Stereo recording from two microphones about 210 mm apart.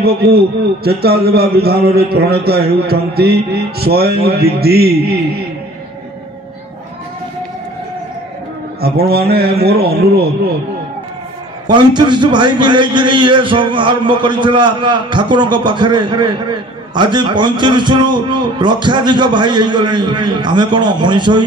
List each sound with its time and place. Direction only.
0.0 s a man's voice: 50° right (ahead or behind)
8.8 s a man's voice: 50° right (ahead or behind)
11.6 s a man's voice: 20° right (ahead or behind)